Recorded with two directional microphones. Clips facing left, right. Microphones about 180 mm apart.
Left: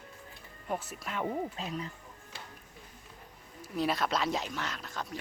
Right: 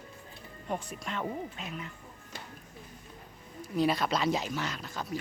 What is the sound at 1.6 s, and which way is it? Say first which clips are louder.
Speech: left 3 dB; 35° left (ahead or behind).